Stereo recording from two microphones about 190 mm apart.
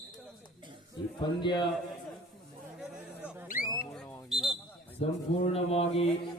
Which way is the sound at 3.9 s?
5° left (ahead or behind).